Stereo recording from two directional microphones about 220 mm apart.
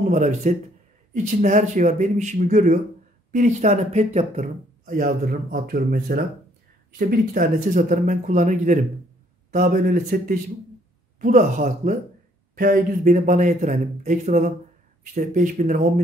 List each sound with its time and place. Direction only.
0.0 s speech: 35° right (ahead or behind)